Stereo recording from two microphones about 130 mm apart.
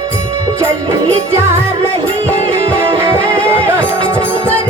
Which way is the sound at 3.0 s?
20° right (ahead or behind).